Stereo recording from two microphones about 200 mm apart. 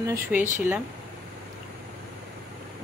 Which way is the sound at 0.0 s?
10° right (ahead or behind).